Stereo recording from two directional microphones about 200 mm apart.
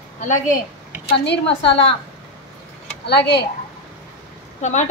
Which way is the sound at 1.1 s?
60° left (ahead or behind).